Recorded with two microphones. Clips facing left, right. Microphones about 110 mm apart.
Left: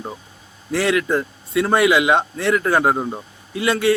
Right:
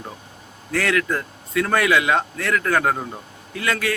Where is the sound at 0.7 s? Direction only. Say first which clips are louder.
Left 3 dB; 25° left (ahead or behind).